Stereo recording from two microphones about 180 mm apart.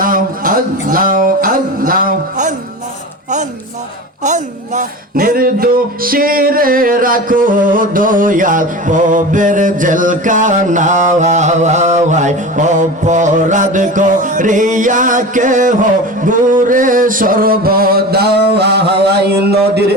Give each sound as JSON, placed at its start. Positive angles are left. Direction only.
{"t": 0.0, "sound": "a sound", "side_deg": -50}
{"t": 4.2, "sound": "speech", "side_deg": -40}
{"t": 16.2, "sound": "mantra", "side_deg": -45}